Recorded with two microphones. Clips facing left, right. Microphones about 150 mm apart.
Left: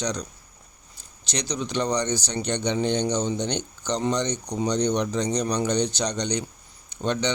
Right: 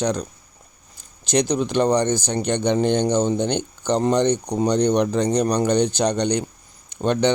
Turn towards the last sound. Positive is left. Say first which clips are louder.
# right 6 dB
turn(degrees=-55)  # may be behind; listen again after turning